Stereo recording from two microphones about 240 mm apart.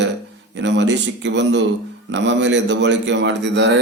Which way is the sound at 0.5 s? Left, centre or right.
Right.